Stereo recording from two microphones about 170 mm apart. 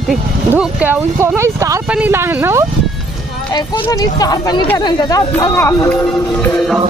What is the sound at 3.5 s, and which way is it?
Speech, 20° left (ahead or behind).